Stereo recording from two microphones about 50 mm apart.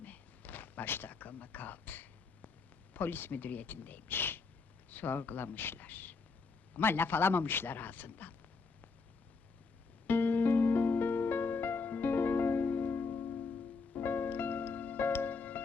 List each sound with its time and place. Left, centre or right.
0.0 s a sound: left
2.9 s speech: left
4.1 s a sound: left
4.9 s speech: left
6.7 s speech: left
10.1 s music: left